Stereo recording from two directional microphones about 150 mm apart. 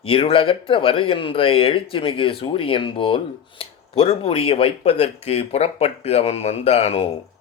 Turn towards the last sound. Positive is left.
turn(degrees=45)  # may be behind; listen again after turning